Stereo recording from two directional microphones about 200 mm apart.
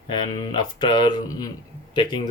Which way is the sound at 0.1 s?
25° left (ahead or behind).